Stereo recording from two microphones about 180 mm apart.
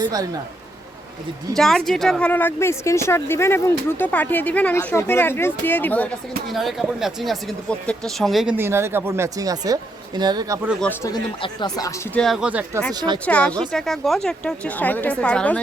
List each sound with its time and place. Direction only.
0.0 s speech: 20° right (ahead or behind)
1.5 s speech: centre (ahead or behind)
8.5 s speech: 15° right (ahead or behind)
11.0 s speech: 25° left (ahead or behind)
12.1 s speech: centre (ahead or behind)
12.9 s speech: 20° right (ahead or behind)
13.2 s speech: 5° left (ahead or behind)